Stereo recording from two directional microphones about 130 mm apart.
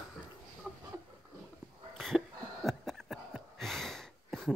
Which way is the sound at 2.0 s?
Centre (ahead or behind).